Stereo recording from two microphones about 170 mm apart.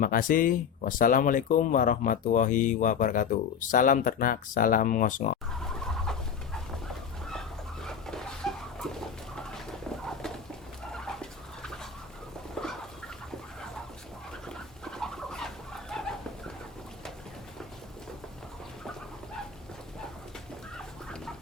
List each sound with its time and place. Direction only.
0.0 s speech: 55° left (ahead or behind)
5.6 s fowl: centre (ahead or behind)
7.3 s a sound: centre (ahead or behind)
14.5 s chicken: centre (ahead or behind)